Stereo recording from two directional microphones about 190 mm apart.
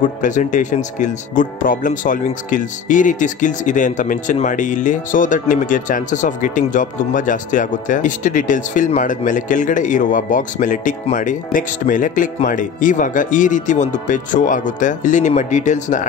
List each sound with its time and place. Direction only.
0.0 s speech: 40° left (ahead or behind)